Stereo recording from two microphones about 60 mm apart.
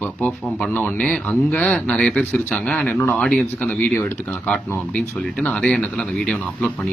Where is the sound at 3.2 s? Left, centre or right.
Centre.